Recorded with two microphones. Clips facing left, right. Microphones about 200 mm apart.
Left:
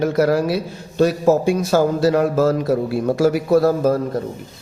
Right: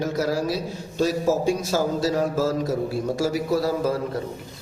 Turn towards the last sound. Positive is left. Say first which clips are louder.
# left 7 dB
turn(degrees=50)  # may be behind; listen again after turning